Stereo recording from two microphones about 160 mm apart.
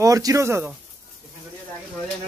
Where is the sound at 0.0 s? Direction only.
20° right (ahead or behind).